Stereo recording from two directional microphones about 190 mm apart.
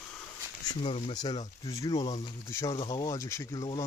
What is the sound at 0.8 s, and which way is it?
Speech, 35° left (ahead or behind).